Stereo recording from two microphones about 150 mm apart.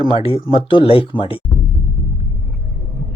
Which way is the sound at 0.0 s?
40° left (ahead or behind).